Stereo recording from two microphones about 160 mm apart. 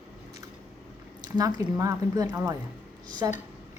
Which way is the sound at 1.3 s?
25° right (ahead or behind).